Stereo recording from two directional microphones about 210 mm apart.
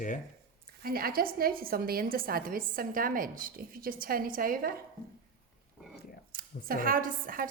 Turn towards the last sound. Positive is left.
turn(degrees=-40)  # may be behind; listen again after turning